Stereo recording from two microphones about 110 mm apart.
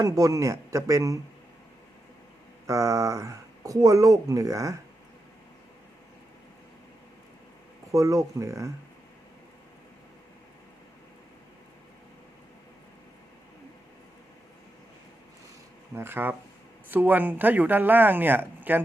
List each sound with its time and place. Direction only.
0.0 s speech: 30° right (ahead or behind)
2.6 s speech: 30° right (ahead or behind)
7.9 s speech: 30° right (ahead or behind)
16.0 s speech: 20° right (ahead or behind)